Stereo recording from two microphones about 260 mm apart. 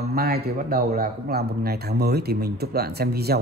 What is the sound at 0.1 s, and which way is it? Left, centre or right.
Speech, right.